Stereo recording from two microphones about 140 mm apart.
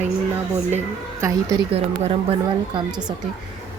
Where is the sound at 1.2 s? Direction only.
25° right (ahead or behind).